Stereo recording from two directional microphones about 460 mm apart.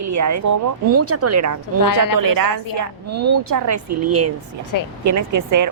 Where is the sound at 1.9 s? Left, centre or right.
Left.